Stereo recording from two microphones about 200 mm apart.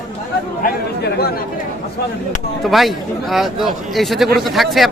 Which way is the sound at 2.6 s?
Centre (ahead or behind).